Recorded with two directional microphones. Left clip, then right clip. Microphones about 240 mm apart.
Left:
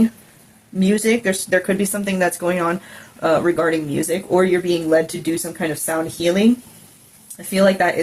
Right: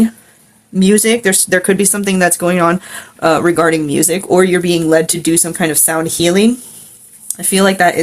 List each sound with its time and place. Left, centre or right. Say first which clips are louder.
0.8 s speech: right 6 dB; right
7.5 s speech: right 5 dB; right